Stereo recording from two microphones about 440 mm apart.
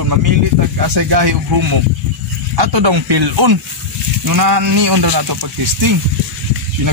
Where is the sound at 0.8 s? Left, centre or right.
Right.